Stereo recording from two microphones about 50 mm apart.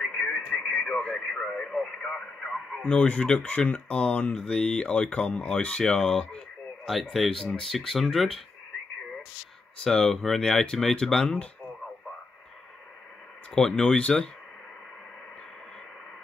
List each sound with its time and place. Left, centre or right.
0.0 s radio: centre
0.5 s speech: centre
2.8 s speech: left
6.9 s speech: centre
9.8 s speech: centre
13.6 s speech: centre
13.8 s speech: left